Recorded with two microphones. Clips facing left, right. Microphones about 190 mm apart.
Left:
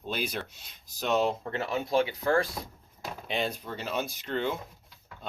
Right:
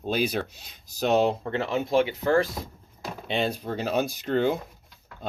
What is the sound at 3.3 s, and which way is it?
Speech, 30° right (ahead or behind).